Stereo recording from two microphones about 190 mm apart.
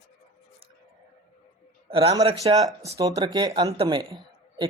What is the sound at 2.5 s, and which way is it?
Speech, 25° right (ahead or behind).